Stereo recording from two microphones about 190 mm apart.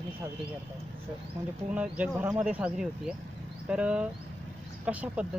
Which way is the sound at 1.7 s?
5° right (ahead or behind).